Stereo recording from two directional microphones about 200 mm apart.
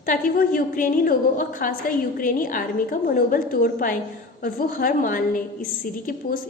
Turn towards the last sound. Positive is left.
turn(degrees=40)  # may be behind; listen again after turning